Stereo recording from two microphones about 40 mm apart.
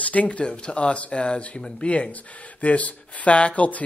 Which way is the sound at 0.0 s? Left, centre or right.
Left.